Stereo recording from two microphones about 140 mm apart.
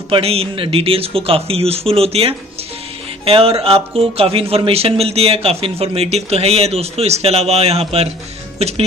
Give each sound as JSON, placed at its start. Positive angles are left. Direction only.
{"t": 0.1, "sound": "speech", "side_deg": -45}